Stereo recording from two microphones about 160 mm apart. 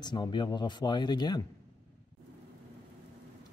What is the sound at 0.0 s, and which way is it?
Speech, 25° left (ahead or behind).